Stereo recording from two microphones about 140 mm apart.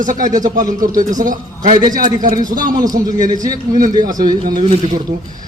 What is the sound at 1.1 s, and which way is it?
Speech, 70° right (ahead or behind).